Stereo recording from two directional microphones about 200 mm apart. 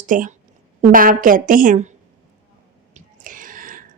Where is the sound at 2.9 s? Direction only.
40° right (ahead or behind).